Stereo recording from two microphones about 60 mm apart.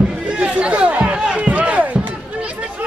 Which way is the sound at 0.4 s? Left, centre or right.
Centre.